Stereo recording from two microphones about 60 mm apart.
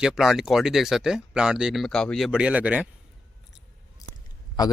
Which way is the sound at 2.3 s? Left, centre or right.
Centre.